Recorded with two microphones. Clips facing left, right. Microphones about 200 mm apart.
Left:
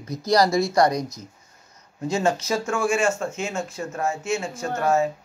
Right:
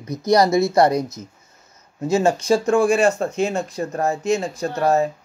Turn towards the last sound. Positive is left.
turn(degrees=-35)  # may be behind; listen again after turning